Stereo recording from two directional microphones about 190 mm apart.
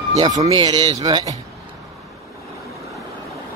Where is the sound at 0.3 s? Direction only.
30° right (ahead or behind).